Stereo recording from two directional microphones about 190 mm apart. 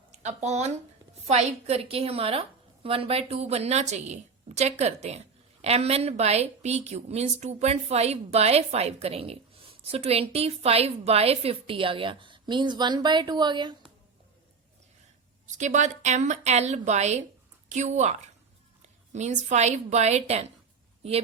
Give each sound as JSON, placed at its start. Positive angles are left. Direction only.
{"t": 0.1, "sound": "a woman's voice", "side_deg": -35}
{"t": 15.4, "sound": "a woman's voice", "side_deg": -40}